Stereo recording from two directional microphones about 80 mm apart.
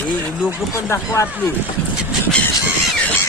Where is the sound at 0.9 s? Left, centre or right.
Left.